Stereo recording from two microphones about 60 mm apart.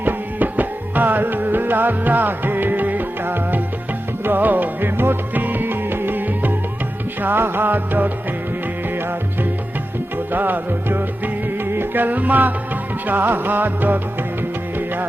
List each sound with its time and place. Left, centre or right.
0.0 s music: right
10.3 s music: right